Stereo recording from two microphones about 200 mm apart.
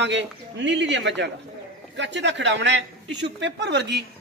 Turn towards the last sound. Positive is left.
turn(degrees=-60)  # may be behind; listen again after turning